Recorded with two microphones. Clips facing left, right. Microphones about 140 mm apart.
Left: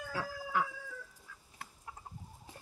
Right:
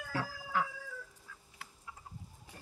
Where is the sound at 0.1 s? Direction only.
15° left (ahead or behind).